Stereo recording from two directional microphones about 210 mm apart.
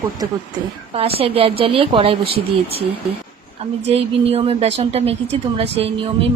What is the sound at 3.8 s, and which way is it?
A woman's voice, 30° right (ahead or behind).